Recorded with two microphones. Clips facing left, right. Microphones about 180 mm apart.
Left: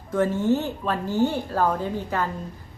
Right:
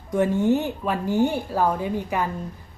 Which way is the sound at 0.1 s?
15° right (ahead or behind).